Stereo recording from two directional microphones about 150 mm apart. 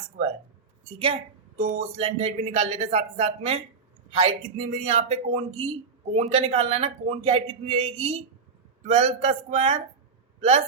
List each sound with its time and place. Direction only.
0.9 s a woman's voice: 35° right (ahead or behind)
1.5 s speech: 45° right (ahead or behind)